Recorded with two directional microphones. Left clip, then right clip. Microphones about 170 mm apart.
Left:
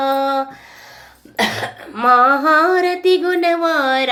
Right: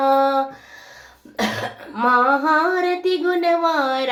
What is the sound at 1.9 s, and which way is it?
Female singing, 20° left (ahead or behind).